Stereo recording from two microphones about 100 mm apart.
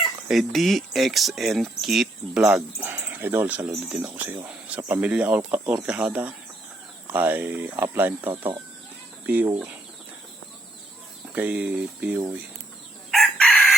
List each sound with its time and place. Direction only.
0.3 s speech: centre (ahead or behind)
2.8 s speech: 20° right (ahead or behind)
11.3 s speech: 15° right (ahead or behind)
13.1 s chicken: centre (ahead or behind)